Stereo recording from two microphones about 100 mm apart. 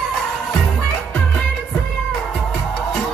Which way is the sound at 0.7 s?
15° left (ahead or behind).